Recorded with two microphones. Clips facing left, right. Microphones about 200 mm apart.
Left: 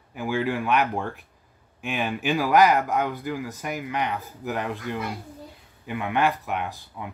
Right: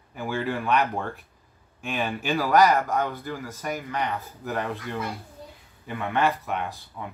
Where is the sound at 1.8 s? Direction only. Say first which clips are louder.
Left 2 dB; 15° left (ahead or behind).